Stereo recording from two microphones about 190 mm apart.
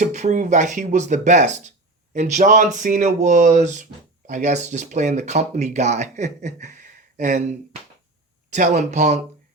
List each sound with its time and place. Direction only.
0.0 s speech: 40° right (ahead or behind)
8.4 s speech: 40° right (ahead or behind)